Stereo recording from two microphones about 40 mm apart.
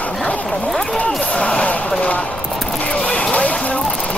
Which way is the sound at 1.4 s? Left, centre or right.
Left.